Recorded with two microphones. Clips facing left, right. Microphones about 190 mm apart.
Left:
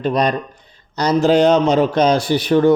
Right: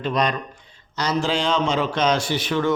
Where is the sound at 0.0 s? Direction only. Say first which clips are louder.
Left 5 dB; 35° left (ahead or behind).